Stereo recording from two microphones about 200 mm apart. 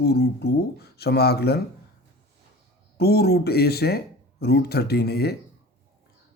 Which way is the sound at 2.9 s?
50° left (ahead or behind).